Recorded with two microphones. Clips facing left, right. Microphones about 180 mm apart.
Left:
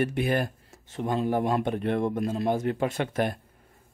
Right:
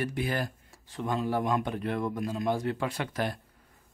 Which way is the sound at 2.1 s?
40° left (ahead or behind).